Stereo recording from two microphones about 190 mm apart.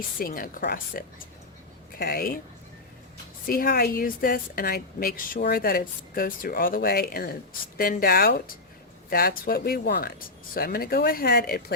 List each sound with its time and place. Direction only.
0.2 s a woman's voice: 50° left (ahead or behind)
3.4 s a woman's voice: 50° left (ahead or behind)